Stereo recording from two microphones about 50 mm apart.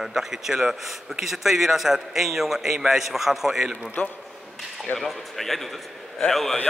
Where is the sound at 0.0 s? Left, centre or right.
Centre.